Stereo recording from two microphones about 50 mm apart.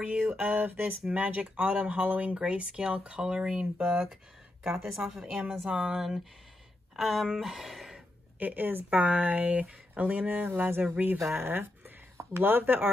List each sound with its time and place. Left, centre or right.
0.0 s a sound: right
0.5 s a woman's voice: right; by 8.0 s centre
8.4 s speech: right